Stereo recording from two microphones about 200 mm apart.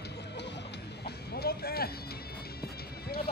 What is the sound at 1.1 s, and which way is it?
Music, 50° left (ahead or behind).